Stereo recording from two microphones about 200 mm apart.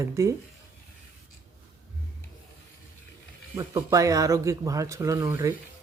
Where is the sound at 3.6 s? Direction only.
20° right (ahead or behind).